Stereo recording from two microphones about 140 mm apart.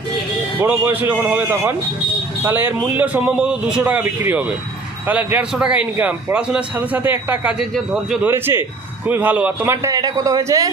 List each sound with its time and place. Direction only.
0.6 s a man's voice: 15° right (ahead or behind)
7.6 s speech: centre (ahead or behind)
8.3 s a man's voice: 15° right (ahead or behind)
9.8 s speech: 25° right (ahead or behind)